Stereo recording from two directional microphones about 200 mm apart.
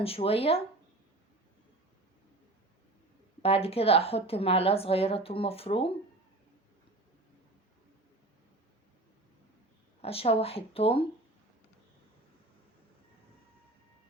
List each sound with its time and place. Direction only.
0.0 s a woman's voice: 30° left (ahead or behind)
3.4 s a woman's voice: 30° left (ahead or behind)
10.0 s a woman's voice: 30° left (ahead or behind)